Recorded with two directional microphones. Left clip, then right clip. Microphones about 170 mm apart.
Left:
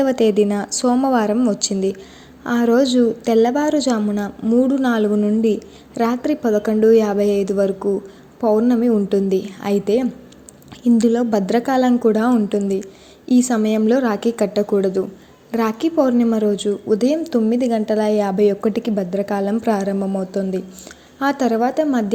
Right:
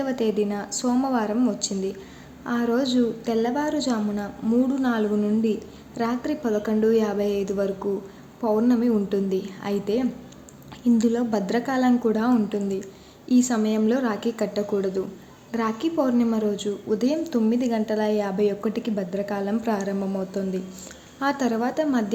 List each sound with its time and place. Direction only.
0.0 s a woman's voice: 40° left (ahead or behind)